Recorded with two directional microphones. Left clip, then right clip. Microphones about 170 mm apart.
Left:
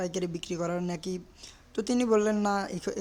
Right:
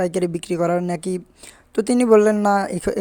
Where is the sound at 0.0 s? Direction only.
35° right (ahead or behind).